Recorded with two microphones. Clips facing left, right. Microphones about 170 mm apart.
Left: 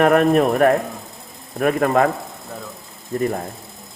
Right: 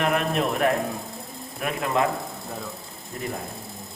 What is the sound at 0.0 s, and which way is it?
Speech, 50° left (ahead or behind).